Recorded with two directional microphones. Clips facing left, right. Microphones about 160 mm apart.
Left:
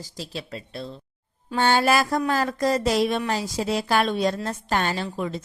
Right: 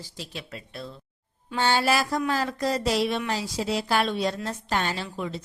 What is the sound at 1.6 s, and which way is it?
Speech, 50° left (ahead or behind).